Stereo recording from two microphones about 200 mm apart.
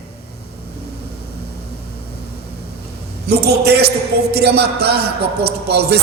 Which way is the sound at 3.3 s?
55° right (ahead or behind).